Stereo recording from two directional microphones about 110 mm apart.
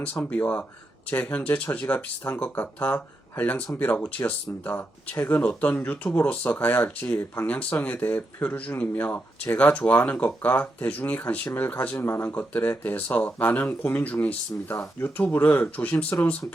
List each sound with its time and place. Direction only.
0.3 s speech: 15° left (ahead or behind)